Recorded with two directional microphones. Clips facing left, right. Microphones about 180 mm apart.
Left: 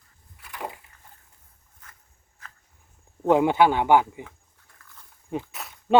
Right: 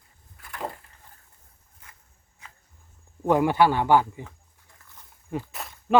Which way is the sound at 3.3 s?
20° left (ahead or behind).